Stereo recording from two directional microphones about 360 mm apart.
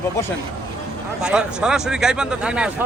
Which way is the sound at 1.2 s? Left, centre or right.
Centre.